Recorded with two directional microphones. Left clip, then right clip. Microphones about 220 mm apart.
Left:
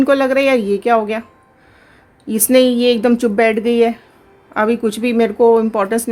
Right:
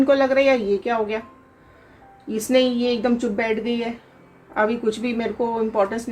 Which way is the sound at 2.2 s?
50° left (ahead or behind).